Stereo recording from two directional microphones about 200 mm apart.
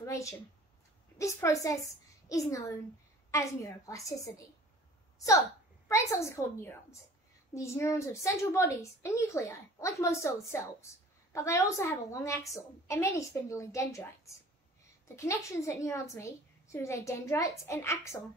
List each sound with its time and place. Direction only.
0.0 s a woman's voice: 15° left (ahead or behind)
5.9 s a woman's voice: 15° left (ahead or behind)